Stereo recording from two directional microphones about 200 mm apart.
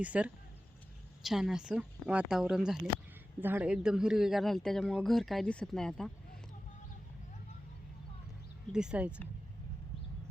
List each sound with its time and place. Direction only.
0.0 s speech: 5° right (ahead or behind)
8.7 s speech: 5° right (ahead or behind)